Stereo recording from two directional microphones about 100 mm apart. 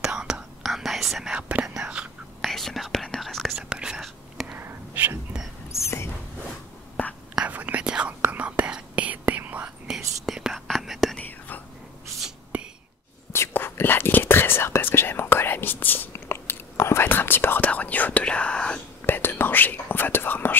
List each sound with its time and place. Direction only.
0.0 s whispering: 5° right (ahead or behind)
3.6 s whispering: 10° right (ahead or behind)
4.6 s whispering: 20° right (ahead or behind)
5.7 s whispering: 30° left (ahead or behind)
7.0 s whispering: 15° left (ahead or behind)
7.3 s whispering: 15° right (ahead or behind)
9.8 s whispering: 5° right (ahead or behind)
11.1 s whispering: 15° left (ahead or behind)
13.3 s whispering: 25° left (ahead or behind)
19.1 s whispering: 20° left (ahead or behind)